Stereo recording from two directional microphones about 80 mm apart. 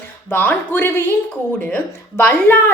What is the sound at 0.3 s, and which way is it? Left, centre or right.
A woman's voice, left.